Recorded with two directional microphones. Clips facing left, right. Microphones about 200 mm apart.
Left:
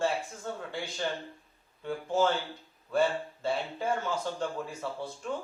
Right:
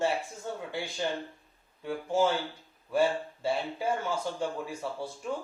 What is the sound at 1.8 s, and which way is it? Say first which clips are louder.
A man's voice: right 1 dB; 10° right (ahead or behind).